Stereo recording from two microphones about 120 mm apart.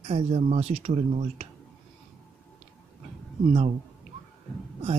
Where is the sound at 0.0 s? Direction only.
60° right (ahead or behind).